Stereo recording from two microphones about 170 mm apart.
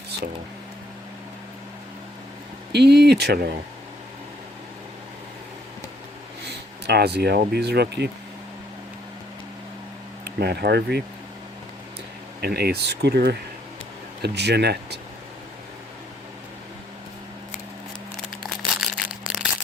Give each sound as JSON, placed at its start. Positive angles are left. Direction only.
{"t": 2.7, "sound": "speech", "side_deg": -75}
{"t": 6.8, "sound": "speech", "side_deg": -70}
{"t": 10.2, "sound": "speech", "side_deg": -70}
{"t": 12.4, "sound": "speech", "side_deg": -65}
{"t": 18.8, "sound": "a sound", "side_deg": 0}